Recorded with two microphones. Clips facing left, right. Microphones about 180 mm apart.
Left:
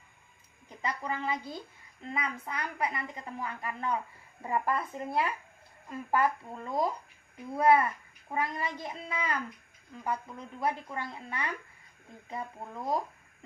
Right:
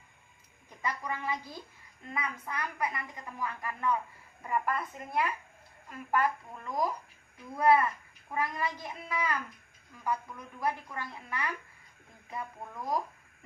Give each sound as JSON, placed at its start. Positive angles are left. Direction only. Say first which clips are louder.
{"t": 0.8, "sound": "a woman's voice", "louder": "left 1 dB", "side_deg": 25}